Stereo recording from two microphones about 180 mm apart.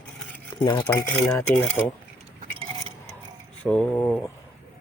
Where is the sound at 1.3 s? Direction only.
10° left (ahead or behind).